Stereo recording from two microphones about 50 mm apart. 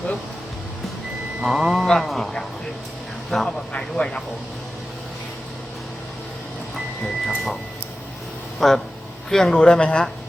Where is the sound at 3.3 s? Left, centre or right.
Centre.